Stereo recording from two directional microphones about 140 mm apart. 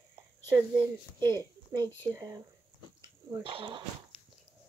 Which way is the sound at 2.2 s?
25° right (ahead or behind).